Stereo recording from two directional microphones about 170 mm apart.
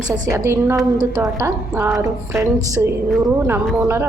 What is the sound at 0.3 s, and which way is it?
A woman's voice, 15° right (ahead or behind).